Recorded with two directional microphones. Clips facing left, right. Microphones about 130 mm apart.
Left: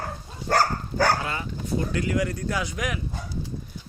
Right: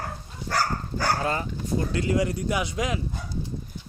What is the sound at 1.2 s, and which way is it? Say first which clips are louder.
Speech: right 4 dB; 40° right (ahead or behind).